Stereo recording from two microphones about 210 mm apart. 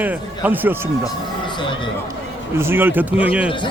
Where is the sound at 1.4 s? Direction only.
25° left (ahead or behind).